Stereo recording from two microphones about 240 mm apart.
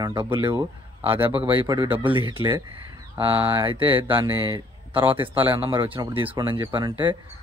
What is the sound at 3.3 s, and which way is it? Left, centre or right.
Speech, centre.